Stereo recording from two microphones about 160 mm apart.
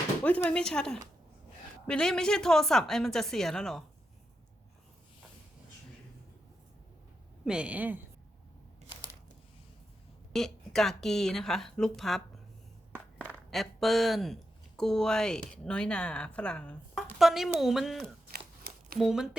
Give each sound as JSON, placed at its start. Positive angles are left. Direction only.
{"t": 0.2, "sound": "speech", "side_deg": 10}
{"t": 7.4, "sound": "a woman's voice", "side_deg": -5}
{"t": 10.3, "sound": "speech", "side_deg": 0}
{"t": 18.3, "sound": "scissors", "side_deg": -70}
{"t": 18.9, "sound": "speech", "side_deg": 0}